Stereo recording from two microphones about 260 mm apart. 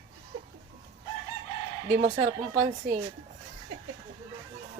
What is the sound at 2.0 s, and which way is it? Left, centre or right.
Speech, centre.